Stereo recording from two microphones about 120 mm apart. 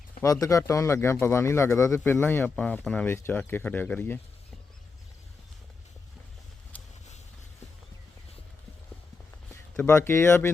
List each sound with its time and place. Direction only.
0.2 s speech: 30° left (ahead or behind)
9.7 s speech: 20° left (ahead or behind)